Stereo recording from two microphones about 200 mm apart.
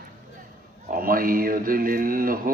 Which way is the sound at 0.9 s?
45° right (ahead or behind).